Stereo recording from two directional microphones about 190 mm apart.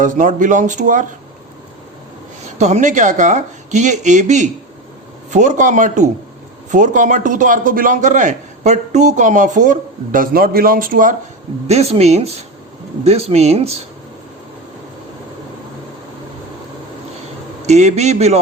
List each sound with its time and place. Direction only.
0.0 s speech: 40° right (ahead or behind)
2.6 s a man's voice: 35° right (ahead or behind)
11.7 s speech: 35° right (ahead or behind)
17.7 s speech: 35° right (ahead or behind)